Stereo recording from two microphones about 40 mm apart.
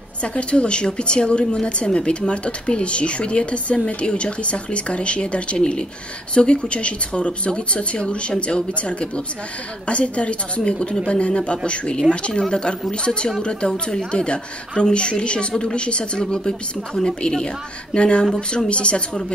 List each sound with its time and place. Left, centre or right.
0.2 s speech: left